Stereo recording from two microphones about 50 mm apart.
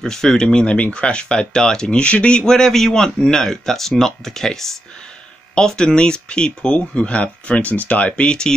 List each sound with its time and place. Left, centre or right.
0.0 s speech: centre
2.4 s speech: centre